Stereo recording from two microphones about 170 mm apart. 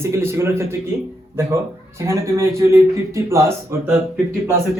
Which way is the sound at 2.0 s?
15° right (ahead or behind).